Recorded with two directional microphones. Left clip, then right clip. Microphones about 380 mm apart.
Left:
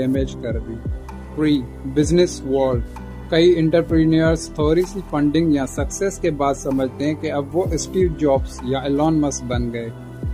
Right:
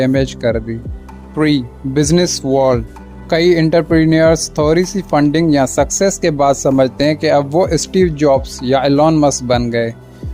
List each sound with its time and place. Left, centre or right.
0.0 s speech: right